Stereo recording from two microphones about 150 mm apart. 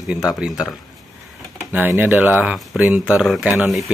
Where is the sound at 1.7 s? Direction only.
15° right (ahead or behind).